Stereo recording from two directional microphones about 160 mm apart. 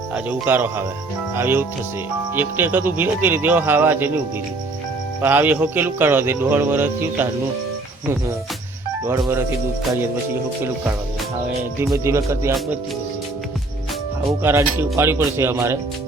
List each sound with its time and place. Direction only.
0.1 s speech: 10° right (ahead or behind)
5.2 s speech: 10° right (ahead or behind)
11.9 s speech: 15° right (ahead or behind)
14.4 s speech: 15° right (ahead or behind)